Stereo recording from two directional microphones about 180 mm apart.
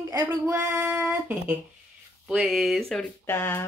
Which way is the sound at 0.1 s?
20° right (ahead or behind).